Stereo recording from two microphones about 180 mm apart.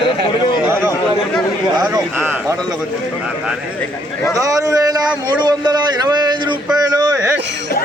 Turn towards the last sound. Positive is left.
turn(degrees=-20)  # may be behind; listen again after turning